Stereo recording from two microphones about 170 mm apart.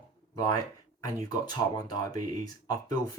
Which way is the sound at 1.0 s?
20° left (ahead or behind).